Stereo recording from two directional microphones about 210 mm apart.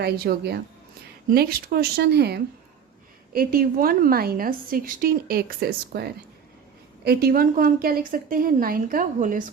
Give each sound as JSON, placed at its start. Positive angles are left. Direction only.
{"t": 0.0, "sound": "a woman's voice", "side_deg": -50}